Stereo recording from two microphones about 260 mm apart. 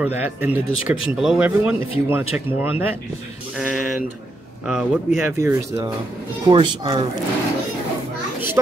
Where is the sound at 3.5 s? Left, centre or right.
Centre.